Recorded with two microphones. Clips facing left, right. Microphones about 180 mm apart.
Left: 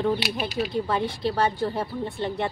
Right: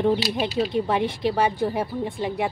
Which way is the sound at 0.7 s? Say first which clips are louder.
Right 3 dB; 20° right (ahead or behind).